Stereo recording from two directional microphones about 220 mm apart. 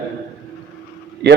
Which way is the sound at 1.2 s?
50° right (ahead or behind).